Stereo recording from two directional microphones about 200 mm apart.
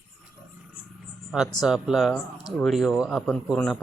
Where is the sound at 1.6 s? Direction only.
Centre (ahead or behind).